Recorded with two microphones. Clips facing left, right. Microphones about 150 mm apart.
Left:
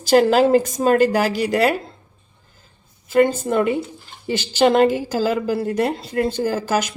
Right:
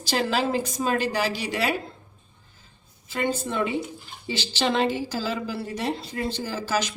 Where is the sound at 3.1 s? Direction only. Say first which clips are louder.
Left 10 dB; 50° left (ahead or behind).